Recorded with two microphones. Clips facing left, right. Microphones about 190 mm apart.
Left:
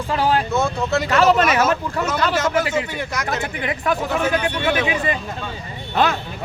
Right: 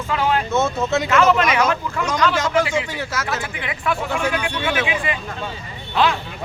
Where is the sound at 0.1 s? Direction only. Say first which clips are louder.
Left 1 dB; 35° left (ahead or behind).